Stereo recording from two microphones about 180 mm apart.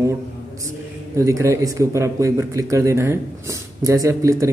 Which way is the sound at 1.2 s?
15° right (ahead or behind).